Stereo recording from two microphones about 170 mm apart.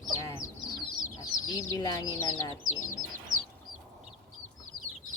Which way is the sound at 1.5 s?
20° left (ahead or behind).